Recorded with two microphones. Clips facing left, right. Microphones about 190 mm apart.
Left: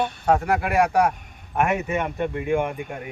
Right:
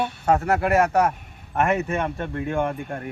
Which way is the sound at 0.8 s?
10° left (ahead or behind).